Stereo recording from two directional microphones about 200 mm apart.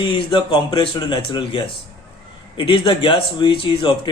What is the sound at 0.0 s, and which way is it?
A man's voice, 25° left (ahead or behind).